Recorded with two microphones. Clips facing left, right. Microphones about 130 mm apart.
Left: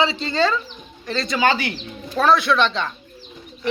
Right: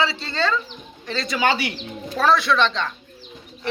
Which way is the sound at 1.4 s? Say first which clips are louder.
Left 1 dB; 15° right (ahead or behind).